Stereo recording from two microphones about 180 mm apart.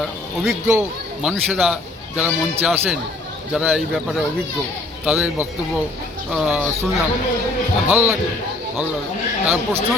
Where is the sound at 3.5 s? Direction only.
Centre (ahead or behind).